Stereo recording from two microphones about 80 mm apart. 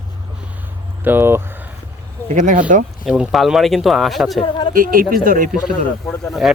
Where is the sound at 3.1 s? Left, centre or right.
Centre.